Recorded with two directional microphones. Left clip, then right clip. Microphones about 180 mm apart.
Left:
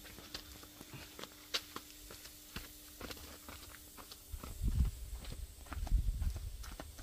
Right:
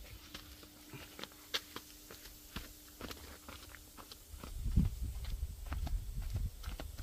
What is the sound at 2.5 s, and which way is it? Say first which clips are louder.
Walk: right 1 dB; 5° right (ahead or behind).